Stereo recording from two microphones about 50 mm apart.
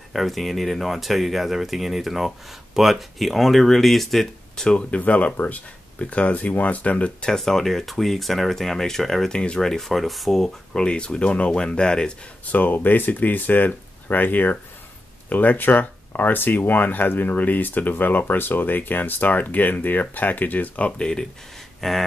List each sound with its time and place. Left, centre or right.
0.1 s speech: centre
4.6 s speech: left
7.3 s speech: centre
10.8 s speech: centre
12.4 s speech: left
21.0 s speech: centre